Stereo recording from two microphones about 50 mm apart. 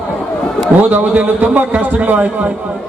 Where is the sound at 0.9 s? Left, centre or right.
Right.